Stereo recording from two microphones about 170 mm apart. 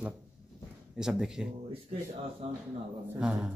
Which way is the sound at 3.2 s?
5° right (ahead or behind).